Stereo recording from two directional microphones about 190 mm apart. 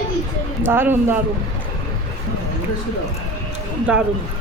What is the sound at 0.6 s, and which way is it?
Speech, 10° right (ahead or behind).